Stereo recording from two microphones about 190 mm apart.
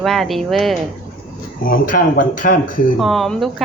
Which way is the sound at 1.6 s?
45° left (ahead or behind).